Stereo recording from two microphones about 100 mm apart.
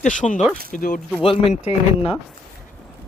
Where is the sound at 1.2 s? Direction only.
80° left.